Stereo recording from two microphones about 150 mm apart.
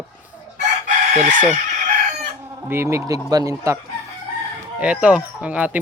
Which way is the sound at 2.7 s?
20° right (ahead or behind).